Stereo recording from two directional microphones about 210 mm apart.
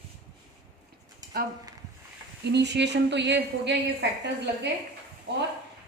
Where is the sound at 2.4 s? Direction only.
55° right (ahead or behind).